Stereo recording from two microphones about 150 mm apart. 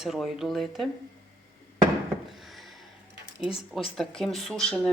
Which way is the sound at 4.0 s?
Centre (ahead or behind).